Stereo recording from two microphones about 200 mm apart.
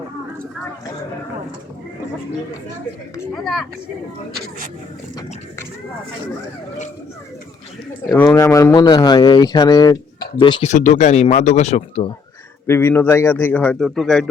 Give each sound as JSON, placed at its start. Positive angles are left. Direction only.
{"t": 3.3, "sound": "speech", "side_deg": 0}
{"t": 8.1, "sound": "speech", "side_deg": 15}
{"t": 10.7, "sound": "speech", "side_deg": 35}
{"t": 12.6, "sound": "a man's voice", "side_deg": 10}